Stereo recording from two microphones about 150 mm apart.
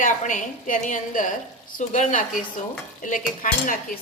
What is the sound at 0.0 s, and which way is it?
Speech, 60° left (ahead or behind).